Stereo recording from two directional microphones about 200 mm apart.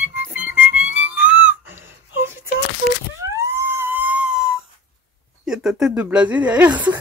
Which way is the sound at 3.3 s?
10° right (ahead or behind).